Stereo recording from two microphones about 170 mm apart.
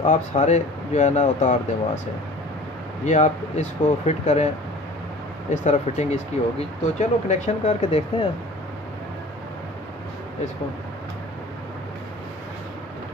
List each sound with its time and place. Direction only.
0.0 s speech: 45° left (ahead or behind)
3.1 s speech: 40° left (ahead or behind)
5.5 s speech: 45° left (ahead or behind)